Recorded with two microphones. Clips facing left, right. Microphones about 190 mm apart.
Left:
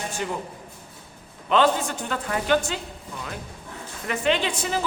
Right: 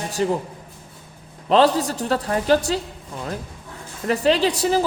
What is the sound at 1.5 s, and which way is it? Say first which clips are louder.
A man's voice: right 4 dB; 35° right (ahead or behind).